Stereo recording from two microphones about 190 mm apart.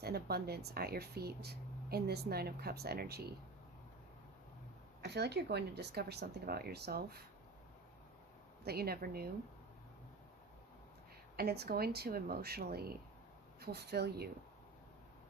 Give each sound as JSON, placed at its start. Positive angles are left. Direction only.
{"t": 0.0, "sound": "speech", "side_deg": -55}
{"t": 5.0, "sound": "speech", "side_deg": -60}
{"t": 8.6, "sound": "speech", "side_deg": -55}
{"t": 11.3, "sound": "speech", "side_deg": -55}